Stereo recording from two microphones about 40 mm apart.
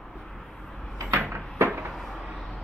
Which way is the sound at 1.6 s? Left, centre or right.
Right.